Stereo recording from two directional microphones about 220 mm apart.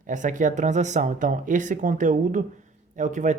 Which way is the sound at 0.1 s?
35° right (ahead or behind).